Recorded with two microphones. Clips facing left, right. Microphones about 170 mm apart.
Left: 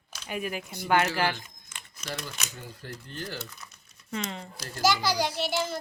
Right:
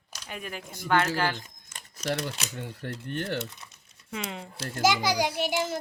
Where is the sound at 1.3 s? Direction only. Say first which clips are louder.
Right 2 dB; 40° right (ahead or behind).